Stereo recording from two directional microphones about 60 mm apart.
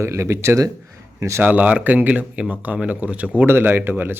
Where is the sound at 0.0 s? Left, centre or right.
Right.